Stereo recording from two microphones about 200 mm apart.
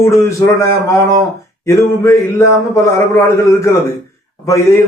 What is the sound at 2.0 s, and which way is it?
Speech, 15° left (ahead or behind).